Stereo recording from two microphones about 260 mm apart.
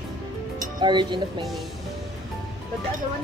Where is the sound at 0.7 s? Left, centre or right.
Centre.